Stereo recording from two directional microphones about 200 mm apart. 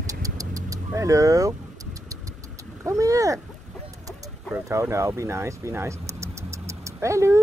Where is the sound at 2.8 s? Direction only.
15° right (ahead or behind).